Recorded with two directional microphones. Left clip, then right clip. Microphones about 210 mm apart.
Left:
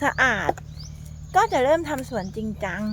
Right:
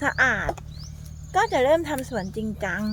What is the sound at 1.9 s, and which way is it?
Speech, 5° right (ahead or behind).